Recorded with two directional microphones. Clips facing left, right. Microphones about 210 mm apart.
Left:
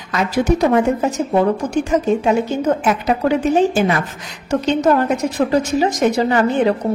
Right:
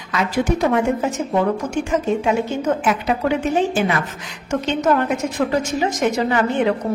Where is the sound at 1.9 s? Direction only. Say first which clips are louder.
Left 3 dB; 40° left (ahead or behind).